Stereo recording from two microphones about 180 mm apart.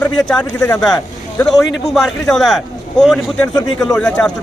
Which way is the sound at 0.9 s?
5° left (ahead or behind).